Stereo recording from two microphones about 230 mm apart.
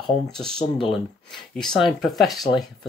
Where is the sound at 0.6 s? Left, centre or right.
Left.